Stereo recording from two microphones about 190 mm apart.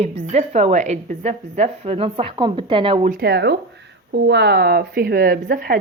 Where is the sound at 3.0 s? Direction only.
50° right (ahead or behind).